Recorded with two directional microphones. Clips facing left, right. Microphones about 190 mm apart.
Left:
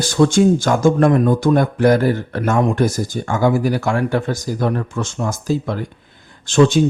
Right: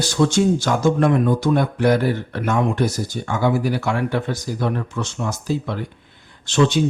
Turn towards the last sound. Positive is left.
turn(degrees=45)  # may be behind; listen again after turning